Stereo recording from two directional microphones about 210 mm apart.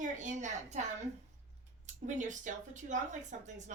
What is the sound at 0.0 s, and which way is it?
Speech, 35° right (ahead or behind).